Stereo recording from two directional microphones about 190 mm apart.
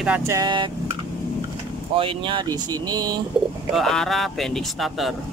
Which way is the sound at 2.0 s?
25° right (ahead or behind).